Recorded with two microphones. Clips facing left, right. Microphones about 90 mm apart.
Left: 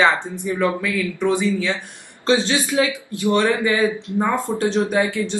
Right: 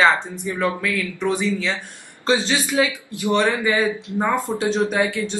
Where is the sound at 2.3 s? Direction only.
20° right (ahead or behind).